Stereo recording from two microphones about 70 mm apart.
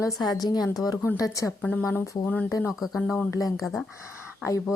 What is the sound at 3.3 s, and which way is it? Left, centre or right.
Speech, left.